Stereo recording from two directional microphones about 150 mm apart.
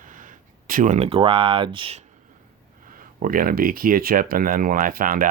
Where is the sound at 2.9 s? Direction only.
65° right (ahead or behind).